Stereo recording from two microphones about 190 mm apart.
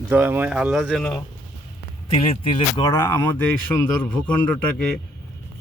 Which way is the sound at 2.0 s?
30° left (ahead or behind).